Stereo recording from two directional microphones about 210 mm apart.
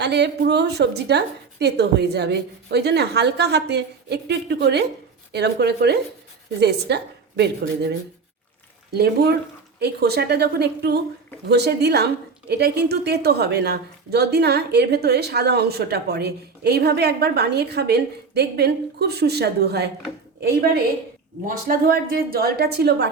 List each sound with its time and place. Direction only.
0.0 s a woman's voice: 55° right (ahead or behind)
21.4 s a woman's voice: 40° right (ahead or behind)